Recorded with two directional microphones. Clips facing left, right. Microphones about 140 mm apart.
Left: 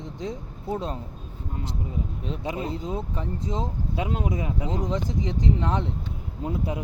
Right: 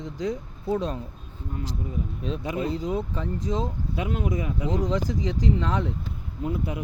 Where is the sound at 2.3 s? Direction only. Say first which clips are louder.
Right 3 dB; 25° left (ahead or behind).